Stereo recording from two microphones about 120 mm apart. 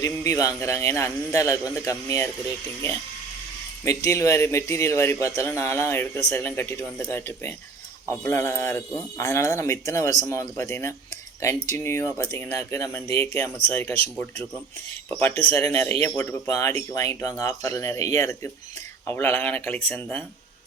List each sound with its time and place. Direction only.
0.0 s speech: 25° left (ahead or behind)
3.8 s speech: 25° left (ahead or behind)